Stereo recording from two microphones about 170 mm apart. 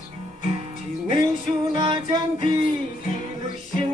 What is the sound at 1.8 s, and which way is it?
Music, 30° right (ahead or behind).